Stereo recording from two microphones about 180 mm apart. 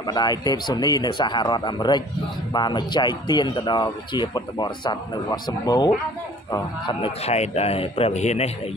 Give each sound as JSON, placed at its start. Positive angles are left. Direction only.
{"t": 0.0, "sound": "a man's voice", "side_deg": 20}